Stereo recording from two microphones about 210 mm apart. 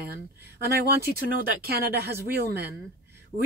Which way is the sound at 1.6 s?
50° right (ahead or behind).